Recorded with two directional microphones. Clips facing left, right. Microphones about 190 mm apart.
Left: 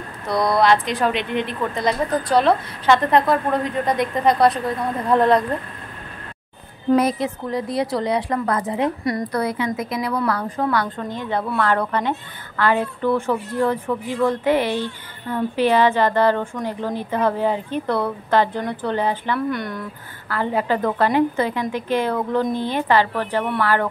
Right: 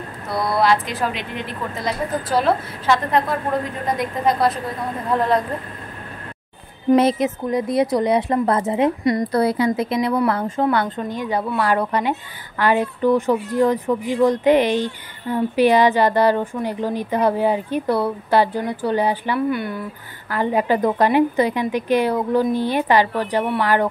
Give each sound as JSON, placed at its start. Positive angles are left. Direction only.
{"t": 0.3, "sound": "a woman's voice", "side_deg": -5}
{"t": 7.0, "sound": "a woman's voice", "side_deg": -25}
{"t": 11.0, "sound": "a woman's voice", "side_deg": -15}
{"t": 20.2, "sound": "a woman's voice", "side_deg": -15}